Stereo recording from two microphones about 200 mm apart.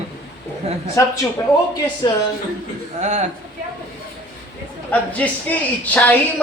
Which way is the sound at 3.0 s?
35° right (ahead or behind).